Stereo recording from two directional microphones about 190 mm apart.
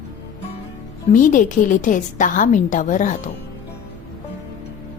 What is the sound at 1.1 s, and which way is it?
A woman's voice, 45° left (ahead or behind).